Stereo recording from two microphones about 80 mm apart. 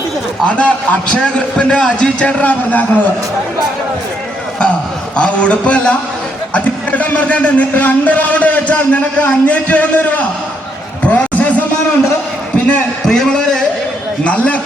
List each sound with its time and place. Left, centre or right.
0.4 s a man's voice: centre
5.1 s a man's voice: centre
11.0 s a sound: centre
12.6 s a man's voice: centre